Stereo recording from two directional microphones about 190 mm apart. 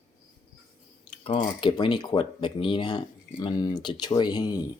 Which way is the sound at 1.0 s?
30° left (ahead or behind).